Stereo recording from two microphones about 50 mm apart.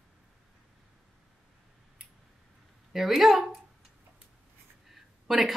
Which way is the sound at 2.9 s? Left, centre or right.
Centre.